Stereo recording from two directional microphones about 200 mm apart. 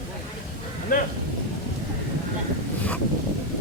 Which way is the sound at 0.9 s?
45° left (ahead or behind).